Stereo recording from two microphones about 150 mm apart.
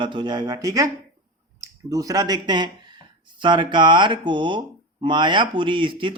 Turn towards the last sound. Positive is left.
turn(degrees=-35)  # may be behind; listen again after turning